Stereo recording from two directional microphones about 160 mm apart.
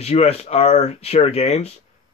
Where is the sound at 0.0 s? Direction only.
40° left (ahead or behind).